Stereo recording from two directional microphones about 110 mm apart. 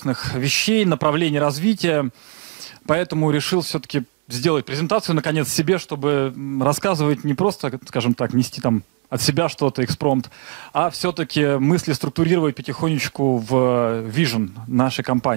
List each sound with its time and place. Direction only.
0.0 s speech: 15° right (ahead or behind)